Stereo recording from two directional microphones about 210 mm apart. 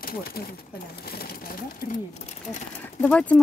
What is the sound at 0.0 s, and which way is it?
Speech, 45° left (ahead or behind).